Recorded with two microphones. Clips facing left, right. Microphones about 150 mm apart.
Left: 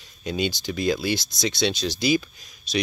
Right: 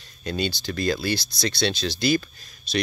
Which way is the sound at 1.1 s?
20° left (ahead or behind).